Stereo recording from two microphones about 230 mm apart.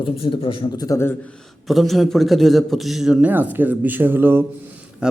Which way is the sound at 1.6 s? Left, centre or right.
Centre.